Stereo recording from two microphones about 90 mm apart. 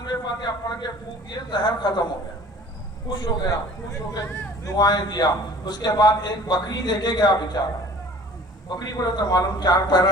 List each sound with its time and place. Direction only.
0.0 s a sound: 50° left (ahead or behind)
1.5 s a man's voice: 55° left (ahead or behind)
3.2 s a man's voice: 40° left (ahead or behind)
8.7 s a man's voice: 45° left (ahead or behind)